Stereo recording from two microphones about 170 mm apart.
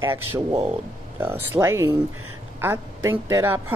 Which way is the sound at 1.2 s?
15° right (ahead or behind).